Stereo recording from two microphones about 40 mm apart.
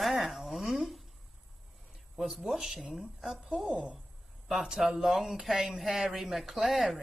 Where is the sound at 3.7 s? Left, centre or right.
Right.